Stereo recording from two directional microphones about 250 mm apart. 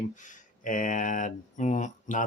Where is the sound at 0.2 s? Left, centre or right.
Left.